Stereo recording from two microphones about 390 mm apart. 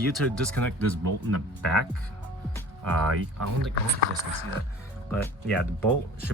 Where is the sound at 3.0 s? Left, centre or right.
Right.